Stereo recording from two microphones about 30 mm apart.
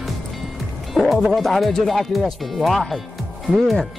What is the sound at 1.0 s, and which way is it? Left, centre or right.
Speech, centre.